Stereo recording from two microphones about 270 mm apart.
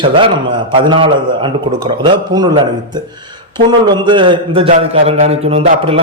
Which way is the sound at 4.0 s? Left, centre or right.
Centre.